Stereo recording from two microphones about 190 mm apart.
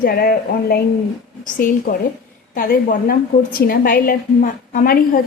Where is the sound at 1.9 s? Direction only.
45° left (ahead or behind).